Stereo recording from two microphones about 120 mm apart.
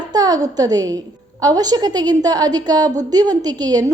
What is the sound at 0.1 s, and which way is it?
A woman's voice, 35° right (ahead or behind).